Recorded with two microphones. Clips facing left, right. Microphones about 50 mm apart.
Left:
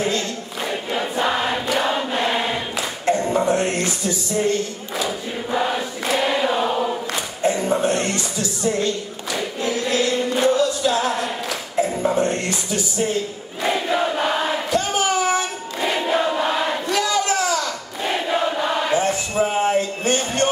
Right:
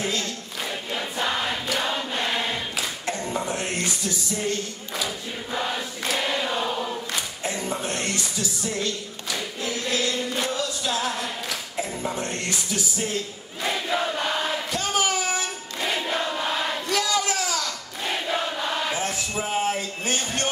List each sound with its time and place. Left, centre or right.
0.7 s choir: centre
3.1 s a sound: centre
4.4 s choir: centre
7.4 s a sound: centre
7.9 s music: centre
13.0 s a sound: centre
14.5 s choir: centre
19.3 s music: centre
19.6 s music: centre